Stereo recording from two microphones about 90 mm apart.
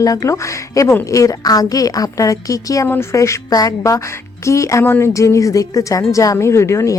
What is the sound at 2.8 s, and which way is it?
A woman's voice, 25° left (ahead or behind).